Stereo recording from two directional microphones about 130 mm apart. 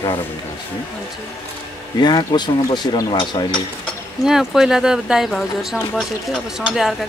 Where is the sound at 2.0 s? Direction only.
35° left (ahead or behind).